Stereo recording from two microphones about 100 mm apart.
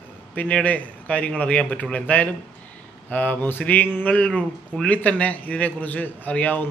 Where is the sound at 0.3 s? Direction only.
15° left (ahead or behind).